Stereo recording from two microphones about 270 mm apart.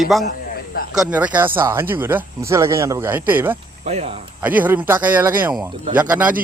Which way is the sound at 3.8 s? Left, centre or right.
Right.